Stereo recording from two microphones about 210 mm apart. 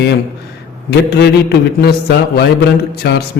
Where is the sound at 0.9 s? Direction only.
50° left (ahead or behind).